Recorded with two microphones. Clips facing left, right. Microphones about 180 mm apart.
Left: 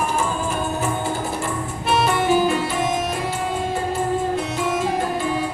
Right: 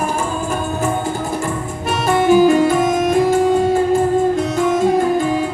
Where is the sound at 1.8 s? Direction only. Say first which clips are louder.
Right 4 dB; 45° right (ahead or behind).